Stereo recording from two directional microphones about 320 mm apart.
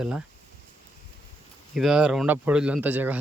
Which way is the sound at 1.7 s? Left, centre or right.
Centre.